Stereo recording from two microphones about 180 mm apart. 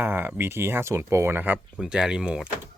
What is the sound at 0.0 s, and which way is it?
Speech, 10° right (ahead or behind).